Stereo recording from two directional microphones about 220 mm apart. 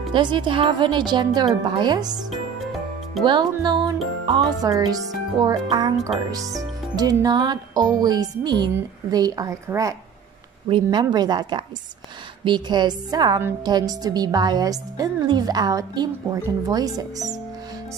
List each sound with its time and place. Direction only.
0.1 s speech: 20° right (ahead or behind)
3.3 s a woman's voice: 20° right (ahead or behind)